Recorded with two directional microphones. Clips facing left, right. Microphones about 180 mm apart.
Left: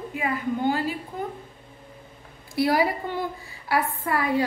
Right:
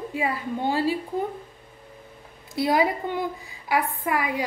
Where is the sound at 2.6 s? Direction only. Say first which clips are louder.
Even; 20° right (ahead or behind).